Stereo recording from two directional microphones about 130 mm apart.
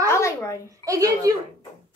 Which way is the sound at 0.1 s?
20° left (ahead or behind).